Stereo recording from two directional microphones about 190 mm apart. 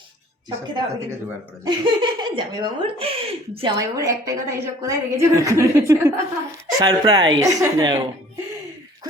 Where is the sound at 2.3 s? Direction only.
25° right (ahead or behind).